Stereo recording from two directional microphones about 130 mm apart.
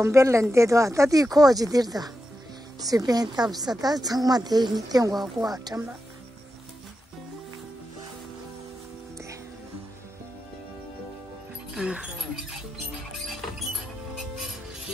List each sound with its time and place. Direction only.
0.0 s a woman's voice: 20° right (ahead or behind)
11.7 s music: 5° right (ahead or behind)